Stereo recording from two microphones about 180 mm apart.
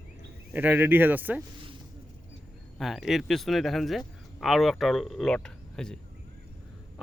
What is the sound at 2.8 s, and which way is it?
Speech, centre (ahead or behind).